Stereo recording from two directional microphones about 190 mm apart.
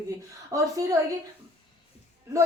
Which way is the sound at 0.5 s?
20° right (ahead or behind).